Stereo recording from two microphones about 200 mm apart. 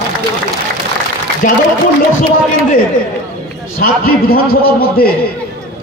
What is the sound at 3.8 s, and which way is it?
A man's voice, 50° left (ahead or behind).